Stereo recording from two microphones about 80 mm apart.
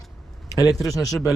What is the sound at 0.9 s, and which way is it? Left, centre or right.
Speech, left.